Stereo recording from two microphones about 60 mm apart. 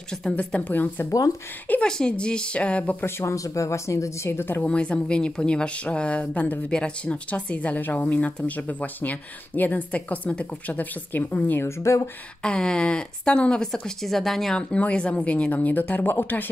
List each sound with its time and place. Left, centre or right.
0.4 s a woman's voice: left
1.9 s speech: centre
3.3 s speech: left
4.6 s a woman's voice: centre
11.6 s speech: left
12.4 s speech: centre
14.8 s a woman's voice: left